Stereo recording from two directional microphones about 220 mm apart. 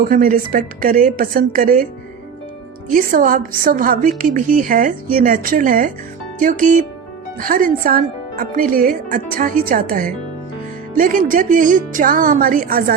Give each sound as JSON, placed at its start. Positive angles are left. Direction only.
{"t": 0.0, "sound": "speech", "side_deg": -40}
{"t": 2.9, "sound": "speech", "side_deg": -40}